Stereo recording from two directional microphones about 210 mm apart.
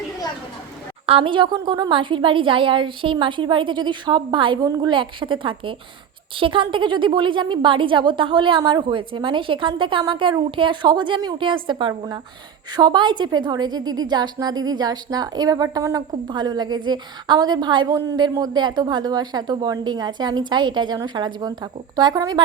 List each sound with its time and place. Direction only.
1.0 s a woman's voice: 25° right (ahead or behind)